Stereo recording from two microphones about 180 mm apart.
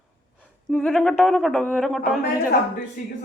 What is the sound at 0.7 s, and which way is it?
Speech, centre (ahead or behind).